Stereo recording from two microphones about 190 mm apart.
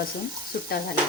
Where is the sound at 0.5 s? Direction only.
50° left (ahead or behind).